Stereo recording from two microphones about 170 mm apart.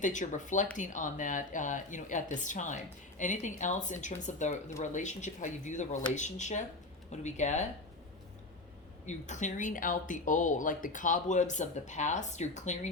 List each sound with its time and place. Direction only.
0.0 s speech: 45° left (ahead or behind)
9.0 s speech: 45° left (ahead or behind)